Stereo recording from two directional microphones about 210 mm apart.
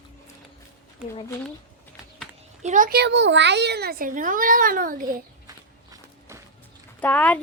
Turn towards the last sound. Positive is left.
turn(degrees=5)  # may be behind; listen again after turning